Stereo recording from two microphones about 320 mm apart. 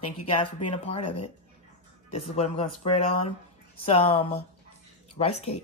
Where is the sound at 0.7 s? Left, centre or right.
Centre.